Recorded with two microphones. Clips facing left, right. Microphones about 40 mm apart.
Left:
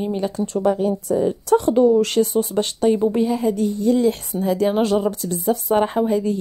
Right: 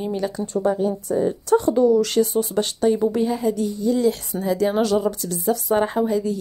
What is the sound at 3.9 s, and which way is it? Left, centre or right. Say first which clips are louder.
A woman's voice: left 2 dB; left.